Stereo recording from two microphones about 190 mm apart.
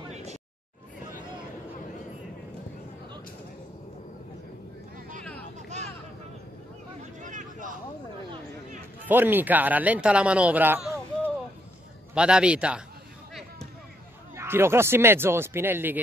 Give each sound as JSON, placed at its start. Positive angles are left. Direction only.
{"t": 7.2, "sound": "vehicle", "side_deg": -40}
{"t": 9.0, "sound": "a man's voice", "side_deg": -10}
{"t": 13.3, "sound": "a sound", "side_deg": 0}
{"t": 14.3, "sound": "speech", "side_deg": -10}